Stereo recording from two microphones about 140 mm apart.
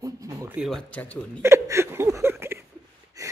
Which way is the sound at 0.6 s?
5° left (ahead or behind).